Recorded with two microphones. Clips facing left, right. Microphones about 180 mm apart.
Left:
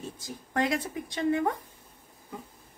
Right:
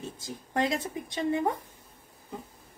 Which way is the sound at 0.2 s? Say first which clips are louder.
Even; 20° right (ahead or behind).